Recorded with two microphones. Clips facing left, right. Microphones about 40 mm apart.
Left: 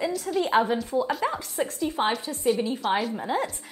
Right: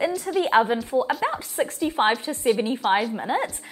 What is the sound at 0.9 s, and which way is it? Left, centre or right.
Speech, centre.